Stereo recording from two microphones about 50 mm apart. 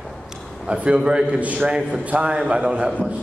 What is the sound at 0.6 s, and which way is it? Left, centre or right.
A man's voice, right.